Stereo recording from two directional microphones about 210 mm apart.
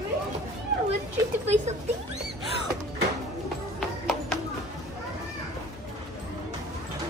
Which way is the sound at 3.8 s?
Centre (ahead or behind).